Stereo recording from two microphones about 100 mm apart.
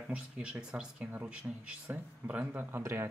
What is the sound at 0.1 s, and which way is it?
Speech, 10° right (ahead or behind).